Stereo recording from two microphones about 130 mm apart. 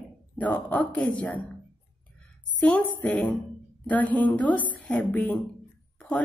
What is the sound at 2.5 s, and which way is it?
A woman's voice, 10° left (ahead or behind).